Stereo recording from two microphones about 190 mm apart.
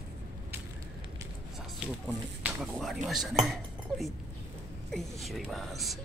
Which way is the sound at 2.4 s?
Centre (ahead or behind).